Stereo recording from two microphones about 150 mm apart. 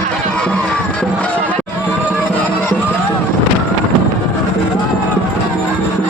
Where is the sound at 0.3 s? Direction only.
5° left (ahead or behind).